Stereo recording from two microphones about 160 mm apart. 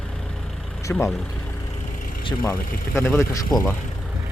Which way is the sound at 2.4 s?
15° left (ahead or behind).